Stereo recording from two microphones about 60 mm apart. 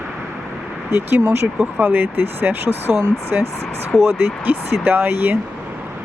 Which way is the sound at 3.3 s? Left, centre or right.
Right.